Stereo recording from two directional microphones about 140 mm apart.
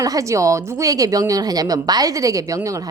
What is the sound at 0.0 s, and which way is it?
A woman's voice, 25° right (ahead or behind).